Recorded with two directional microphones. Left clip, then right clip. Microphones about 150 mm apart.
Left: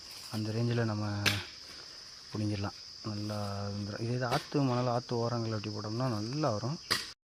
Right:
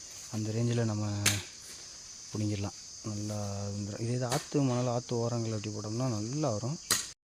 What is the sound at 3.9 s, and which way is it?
Speech, 25° right (ahead or behind).